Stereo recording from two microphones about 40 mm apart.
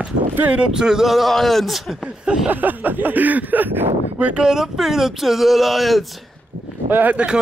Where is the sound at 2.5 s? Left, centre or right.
Right.